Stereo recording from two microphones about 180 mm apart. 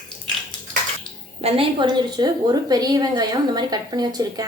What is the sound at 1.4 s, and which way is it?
A woman's voice, 30° right (ahead or behind).